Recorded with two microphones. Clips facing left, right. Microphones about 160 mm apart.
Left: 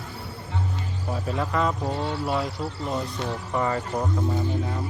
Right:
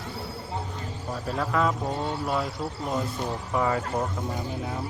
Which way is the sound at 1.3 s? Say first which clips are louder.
Even; centre (ahead or behind).